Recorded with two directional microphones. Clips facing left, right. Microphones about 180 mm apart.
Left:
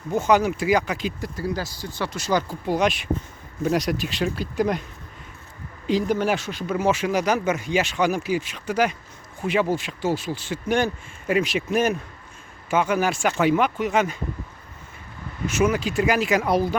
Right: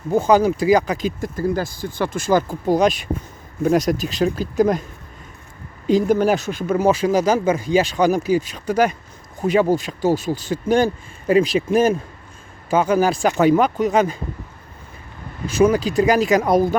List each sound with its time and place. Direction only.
0.1 s speech: 35° right (ahead or behind)
5.9 s speech: 45° right (ahead or behind)
15.4 s speech: 35° right (ahead or behind)